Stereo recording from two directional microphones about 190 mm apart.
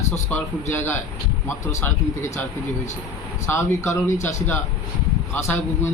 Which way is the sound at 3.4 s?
15° left (ahead or behind).